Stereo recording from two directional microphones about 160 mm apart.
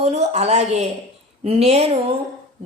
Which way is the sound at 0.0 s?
45° right (ahead or behind).